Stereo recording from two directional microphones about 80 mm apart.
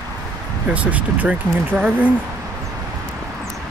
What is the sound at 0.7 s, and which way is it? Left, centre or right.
Speech, centre.